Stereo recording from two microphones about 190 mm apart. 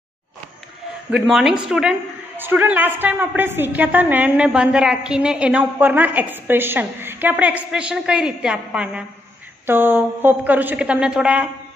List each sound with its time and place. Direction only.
1.1 s a woman's voice: centre (ahead or behind)